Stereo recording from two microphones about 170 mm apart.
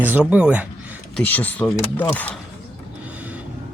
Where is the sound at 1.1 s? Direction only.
10° left (ahead or behind).